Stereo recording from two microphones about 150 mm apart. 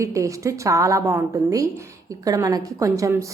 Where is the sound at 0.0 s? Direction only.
20° right (ahead or behind).